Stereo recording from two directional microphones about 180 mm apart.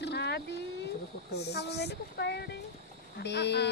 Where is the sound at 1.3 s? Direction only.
65° left (ahead or behind).